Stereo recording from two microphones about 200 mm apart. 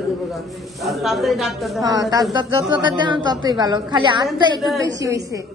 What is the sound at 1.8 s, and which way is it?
A woman's voice, 20° right (ahead or behind).